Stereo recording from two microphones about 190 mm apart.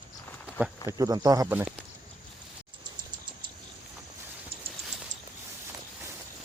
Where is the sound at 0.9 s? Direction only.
20° right (ahead or behind).